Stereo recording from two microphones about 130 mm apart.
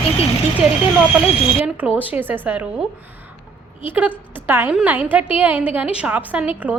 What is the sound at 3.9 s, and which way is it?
A woman's voice, 15° right (ahead or behind).